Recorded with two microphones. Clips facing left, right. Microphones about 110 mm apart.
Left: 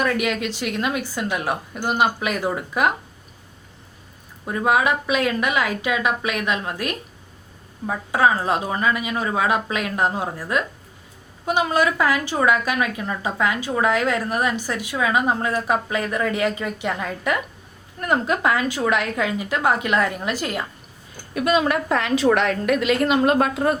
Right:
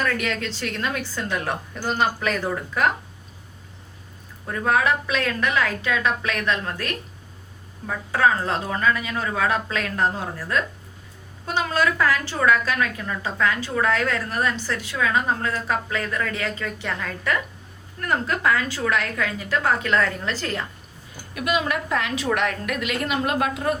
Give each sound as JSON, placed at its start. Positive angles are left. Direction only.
{"t": 0.0, "sound": "a woman's voice", "side_deg": 15}
{"t": 4.4, "sound": "a woman's voice", "side_deg": 15}
{"t": 21.3, "sound": "a woman's voice", "side_deg": 35}